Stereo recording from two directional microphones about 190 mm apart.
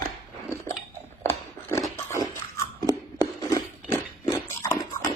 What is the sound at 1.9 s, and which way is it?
Pig, 15° left (ahead or behind).